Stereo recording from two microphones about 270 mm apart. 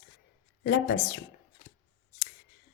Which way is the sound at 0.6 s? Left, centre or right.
Left.